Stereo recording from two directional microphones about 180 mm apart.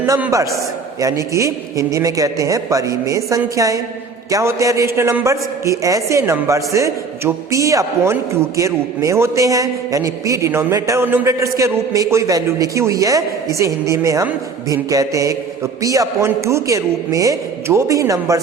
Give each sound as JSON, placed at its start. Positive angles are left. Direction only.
{"t": 0.0, "sound": "a man's voice", "side_deg": -15}